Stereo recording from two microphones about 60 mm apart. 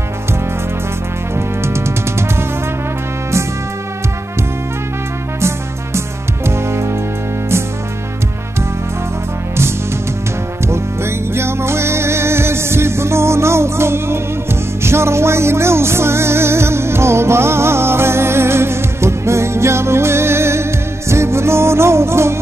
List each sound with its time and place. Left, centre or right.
1.6 s music: right
5.9 s music: right
10.7 s music: right